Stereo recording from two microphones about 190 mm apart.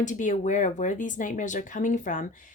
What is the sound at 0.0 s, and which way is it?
A woman's voice, 40° left (ahead or behind).